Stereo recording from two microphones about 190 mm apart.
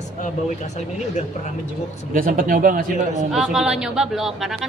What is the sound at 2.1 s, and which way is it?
Speech, 45° right (ahead or behind).